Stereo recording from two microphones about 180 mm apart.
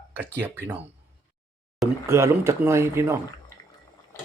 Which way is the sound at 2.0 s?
15° right (ahead or behind).